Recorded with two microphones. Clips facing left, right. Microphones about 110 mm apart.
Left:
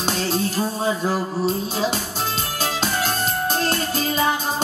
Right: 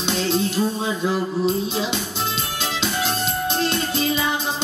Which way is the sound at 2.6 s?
45° left (ahead or behind).